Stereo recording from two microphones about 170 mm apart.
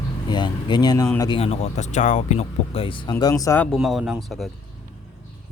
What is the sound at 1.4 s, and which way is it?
Speech, 40° left (ahead or behind).